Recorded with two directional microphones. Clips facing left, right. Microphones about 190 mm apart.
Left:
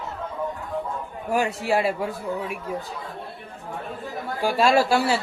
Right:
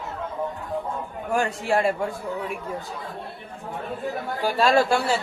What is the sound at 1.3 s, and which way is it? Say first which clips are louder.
Speech: left 1 dB; 5° left (ahead or behind).